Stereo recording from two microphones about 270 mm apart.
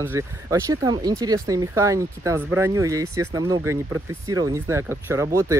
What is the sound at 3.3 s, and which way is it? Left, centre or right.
A man's voice, centre.